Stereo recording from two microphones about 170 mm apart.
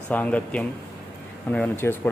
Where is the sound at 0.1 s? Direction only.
10° left (ahead or behind).